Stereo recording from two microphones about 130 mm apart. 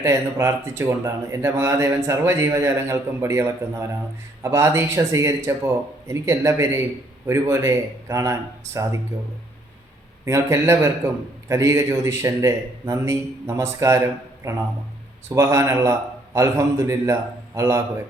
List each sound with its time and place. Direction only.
0.0 s a man's voice: 20° right (ahead or behind)
10.2 s a man's voice: 20° right (ahead or behind)